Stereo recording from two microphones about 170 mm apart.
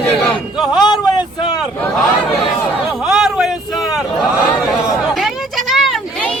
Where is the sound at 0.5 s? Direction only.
5° right (ahead or behind).